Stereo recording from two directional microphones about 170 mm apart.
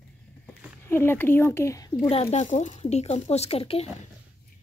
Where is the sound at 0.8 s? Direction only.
15° left (ahead or behind).